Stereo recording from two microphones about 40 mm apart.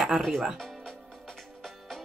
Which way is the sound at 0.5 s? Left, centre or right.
Centre.